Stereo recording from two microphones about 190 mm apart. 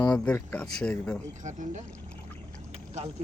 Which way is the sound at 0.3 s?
5° left (ahead or behind).